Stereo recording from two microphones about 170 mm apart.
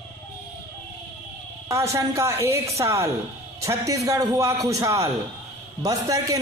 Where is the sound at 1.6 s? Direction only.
15° right (ahead or behind).